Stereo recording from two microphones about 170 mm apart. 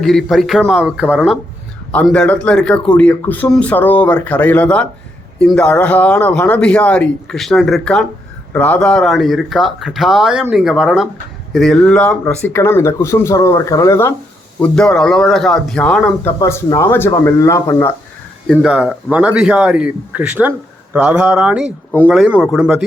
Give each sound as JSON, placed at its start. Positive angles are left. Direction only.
{"t": 0.0, "sound": "speech", "side_deg": 0}
{"t": 1.9, "sound": "speech", "side_deg": 5}
{"t": 14.6, "sound": "speech", "side_deg": 5}
{"t": 18.4, "sound": "speech", "side_deg": 0}